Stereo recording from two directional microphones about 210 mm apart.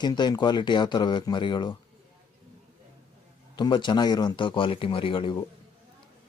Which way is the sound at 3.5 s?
20° left (ahead or behind).